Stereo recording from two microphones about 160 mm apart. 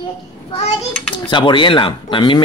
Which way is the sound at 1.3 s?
30° left (ahead or behind).